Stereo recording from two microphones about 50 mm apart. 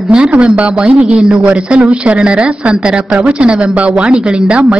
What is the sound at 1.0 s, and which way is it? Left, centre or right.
Speech, centre.